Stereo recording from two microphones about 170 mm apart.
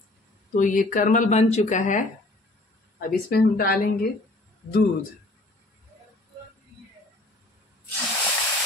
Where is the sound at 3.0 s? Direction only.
60° left (ahead or behind).